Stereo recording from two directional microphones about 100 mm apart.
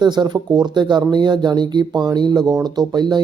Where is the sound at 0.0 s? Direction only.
45° right (ahead or behind).